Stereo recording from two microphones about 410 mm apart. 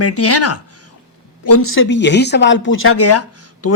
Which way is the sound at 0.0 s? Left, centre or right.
Left.